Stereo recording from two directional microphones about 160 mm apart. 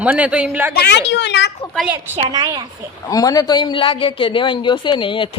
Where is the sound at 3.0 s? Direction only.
20° left (ahead or behind).